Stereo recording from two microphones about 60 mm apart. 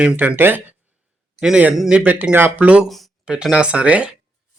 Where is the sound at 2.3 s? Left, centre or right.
Right.